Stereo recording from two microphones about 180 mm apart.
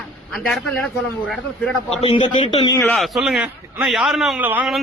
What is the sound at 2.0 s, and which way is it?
Speech, 30° left (ahead or behind).